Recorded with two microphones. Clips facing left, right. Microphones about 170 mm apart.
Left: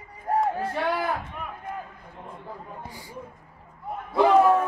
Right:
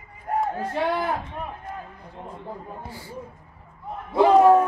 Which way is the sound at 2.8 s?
15° left (ahead or behind).